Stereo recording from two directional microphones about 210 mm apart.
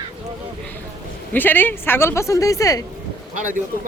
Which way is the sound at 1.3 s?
10° left (ahead or behind).